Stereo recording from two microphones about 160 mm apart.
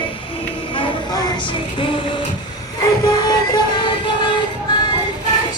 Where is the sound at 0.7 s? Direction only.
30° left (ahead or behind).